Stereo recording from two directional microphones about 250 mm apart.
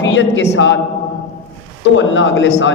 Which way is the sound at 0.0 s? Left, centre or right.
Left.